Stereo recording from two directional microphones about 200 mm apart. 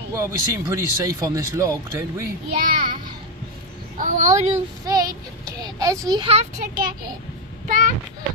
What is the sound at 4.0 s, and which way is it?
Speech, 40° right (ahead or behind).